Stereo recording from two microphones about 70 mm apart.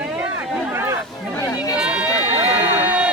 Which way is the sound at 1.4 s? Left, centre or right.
Left.